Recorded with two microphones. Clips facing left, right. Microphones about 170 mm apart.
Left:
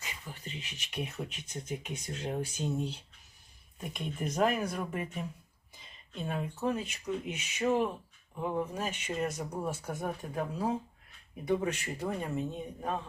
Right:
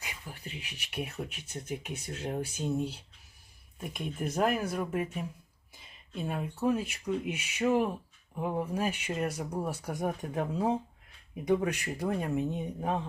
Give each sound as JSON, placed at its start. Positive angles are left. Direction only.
{"t": 0.0, "sound": "speech", "side_deg": -10}
{"t": 12.5, "sound": "speech", "side_deg": -20}